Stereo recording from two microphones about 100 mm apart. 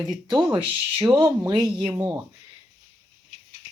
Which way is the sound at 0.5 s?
55° right (ahead or behind).